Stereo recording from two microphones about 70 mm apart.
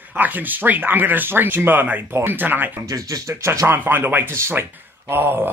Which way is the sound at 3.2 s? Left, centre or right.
Right.